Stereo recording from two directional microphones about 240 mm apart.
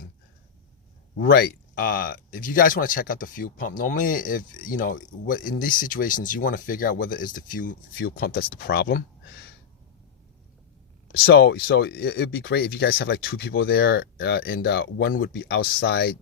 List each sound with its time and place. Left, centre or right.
1.1 s speech: left
11.1 s speech: left